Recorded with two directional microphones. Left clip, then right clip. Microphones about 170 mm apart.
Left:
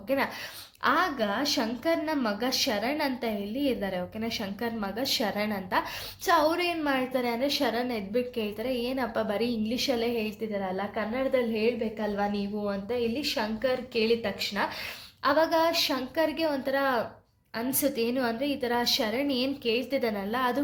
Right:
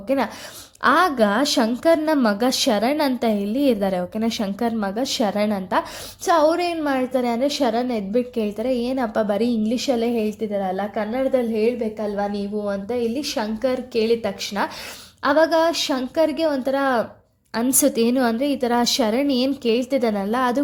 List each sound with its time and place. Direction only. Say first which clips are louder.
0.8 s a woman's voice: right 9 dB; 55° right (ahead or behind)
17.5 s a woman's voice: right 9 dB; 60° right (ahead or behind)